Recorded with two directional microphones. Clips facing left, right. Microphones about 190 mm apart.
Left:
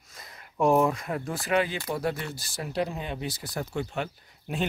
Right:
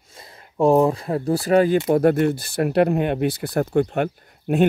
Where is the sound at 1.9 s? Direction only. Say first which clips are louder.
Right 14 dB; 55° right (ahead or behind).